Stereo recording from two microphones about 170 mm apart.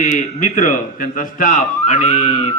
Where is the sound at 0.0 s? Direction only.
45° left (ahead or behind).